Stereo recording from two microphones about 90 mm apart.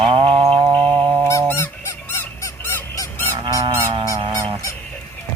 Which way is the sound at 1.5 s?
25° left (ahead or behind).